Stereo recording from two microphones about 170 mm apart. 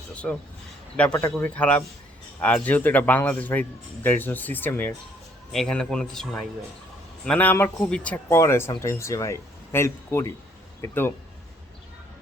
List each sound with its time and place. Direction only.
0.1 s a man's voice: 5° left (ahead or behind)